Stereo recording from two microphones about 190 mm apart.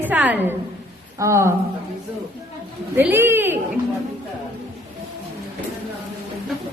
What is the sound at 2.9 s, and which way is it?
Speech, 10° right (ahead or behind).